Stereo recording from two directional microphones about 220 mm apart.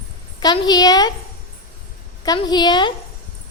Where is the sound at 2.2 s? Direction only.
20° left (ahead or behind).